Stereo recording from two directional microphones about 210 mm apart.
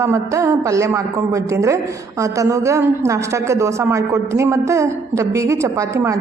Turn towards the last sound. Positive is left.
turn(degrees=-15)  # may be behind; listen again after turning